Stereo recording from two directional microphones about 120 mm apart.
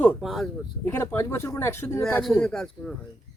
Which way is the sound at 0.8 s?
20° left (ahead or behind).